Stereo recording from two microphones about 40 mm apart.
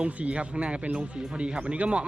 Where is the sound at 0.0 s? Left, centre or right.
Right.